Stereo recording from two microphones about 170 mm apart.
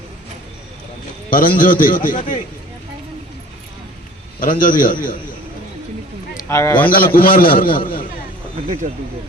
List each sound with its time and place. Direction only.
1.3 s a man's voice: 55° left (ahead or behind)
4.4 s a man's voice: 55° left (ahead or behind)
6.3 s speech: 15° left (ahead or behind)
6.9 s a man's voice: 60° left (ahead or behind)
8.6 s speech: 50° right (ahead or behind)